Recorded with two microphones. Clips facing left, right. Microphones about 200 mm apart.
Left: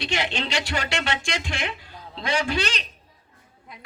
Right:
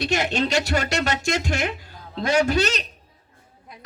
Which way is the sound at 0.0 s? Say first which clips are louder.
Right 5 dB; 40° right (ahead or behind).